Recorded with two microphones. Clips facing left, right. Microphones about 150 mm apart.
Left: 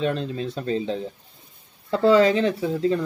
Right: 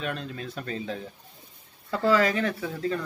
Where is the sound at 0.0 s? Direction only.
30° left (ahead or behind).